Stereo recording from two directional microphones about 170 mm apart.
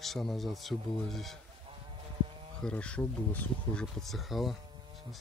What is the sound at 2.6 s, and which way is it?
Speech, 5° left (ahead or behind).